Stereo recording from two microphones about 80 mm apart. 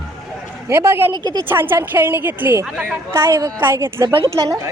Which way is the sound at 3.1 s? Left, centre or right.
Right.